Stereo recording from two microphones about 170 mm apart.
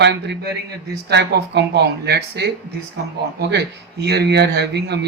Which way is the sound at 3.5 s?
75° right (ahead or behind).